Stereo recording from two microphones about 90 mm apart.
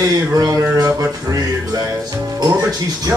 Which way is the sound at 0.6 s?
35° right (ahead or behind).